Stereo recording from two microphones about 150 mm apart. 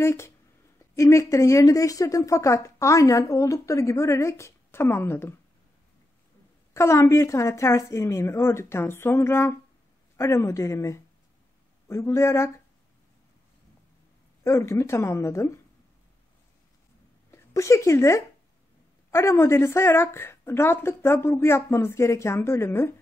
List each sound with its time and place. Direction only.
0.0 s a woman's voice: 20° left (ahead or behind)
6.7 s a woman's voice: 20° left (ahead or behind)
14.4 s a woman's voice: 20° left (ahead or behind)
17.3 s a woman's voice: 20° left (ahead or behind)